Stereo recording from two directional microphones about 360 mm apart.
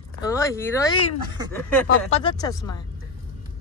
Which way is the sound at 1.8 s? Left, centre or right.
Centre.